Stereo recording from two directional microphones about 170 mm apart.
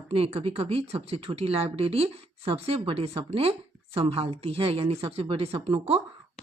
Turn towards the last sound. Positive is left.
turn(degrees=-35)  # may be behind; listen again after turning